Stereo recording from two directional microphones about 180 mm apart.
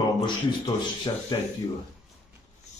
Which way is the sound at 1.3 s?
25° left (ahead or behind).